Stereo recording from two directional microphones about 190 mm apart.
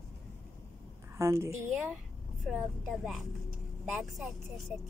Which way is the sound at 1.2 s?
15° right (ahead or behind).